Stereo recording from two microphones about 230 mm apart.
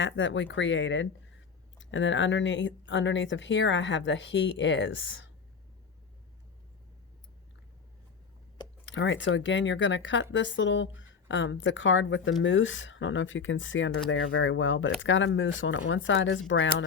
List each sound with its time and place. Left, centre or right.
0.0 s speech: left
8.9 s speech: left